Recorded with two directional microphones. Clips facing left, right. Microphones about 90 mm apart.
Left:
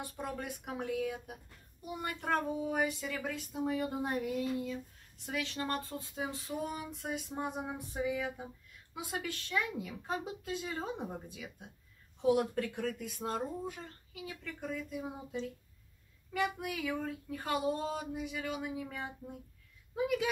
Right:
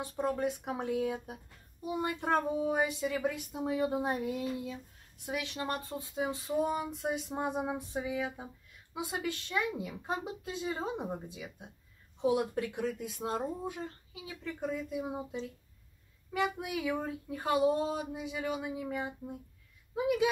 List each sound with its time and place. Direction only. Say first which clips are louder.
0.0 s speech: right 8 dB; 25° right (ahead or behind)